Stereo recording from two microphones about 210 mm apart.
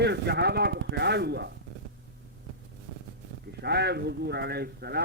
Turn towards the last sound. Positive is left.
turn(degrees=-50)  # may be behind; listen again after turning